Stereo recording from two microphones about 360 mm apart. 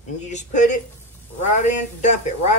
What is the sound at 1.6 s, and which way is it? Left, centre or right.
Speech, centre.